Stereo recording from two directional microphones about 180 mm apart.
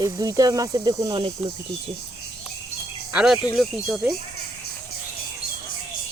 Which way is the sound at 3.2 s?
Centre (ahead or behind).